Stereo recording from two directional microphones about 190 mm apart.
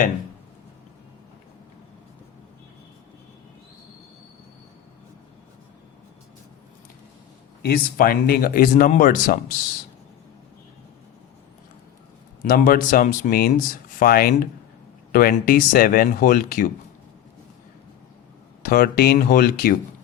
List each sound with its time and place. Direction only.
7.6 s speech: 50° left (ahead or behind)
12.4 s speech: 50° left (ahead or behind)
18.6 s speech: 50° left (ahead or behind)